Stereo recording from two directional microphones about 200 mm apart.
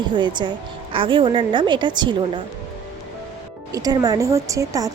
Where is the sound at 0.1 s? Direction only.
20° right (ahead or behind).